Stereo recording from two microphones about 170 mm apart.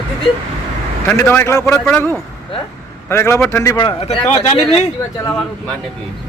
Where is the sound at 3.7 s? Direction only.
35° left (ahead or behind).